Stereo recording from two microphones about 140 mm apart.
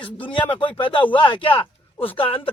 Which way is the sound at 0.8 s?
35° left (ahead or behind).